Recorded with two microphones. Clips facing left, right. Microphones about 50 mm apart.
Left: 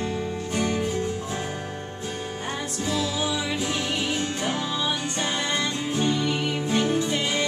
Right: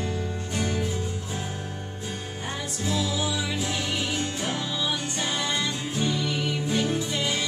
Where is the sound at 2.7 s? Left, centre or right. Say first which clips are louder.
Left 1 dB; centre.